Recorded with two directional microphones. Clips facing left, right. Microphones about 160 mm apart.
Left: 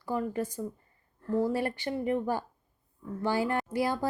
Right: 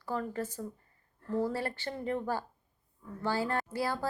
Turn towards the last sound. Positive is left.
turn(degrees=15)  # may be behind; listen again after turning